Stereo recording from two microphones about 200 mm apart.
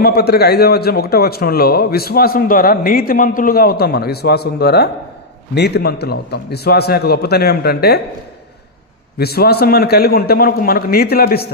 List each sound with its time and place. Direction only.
0.0 s a man's voice: 50° left (ahead or behind)
9.2 s a man's voice: 50° left (ahead or behind)